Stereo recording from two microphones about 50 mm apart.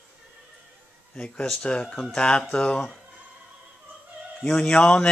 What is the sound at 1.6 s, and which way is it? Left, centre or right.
Speech, centre.